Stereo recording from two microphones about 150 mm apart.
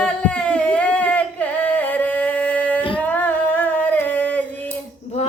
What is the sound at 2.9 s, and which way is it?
Female singing, 10° left (ahead or behind).